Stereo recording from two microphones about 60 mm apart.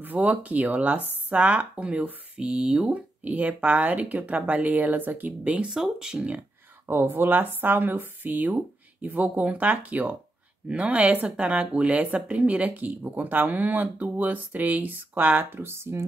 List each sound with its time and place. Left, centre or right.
0.0 s speech: right
5.7 s speech: centre
6.9 s speech: right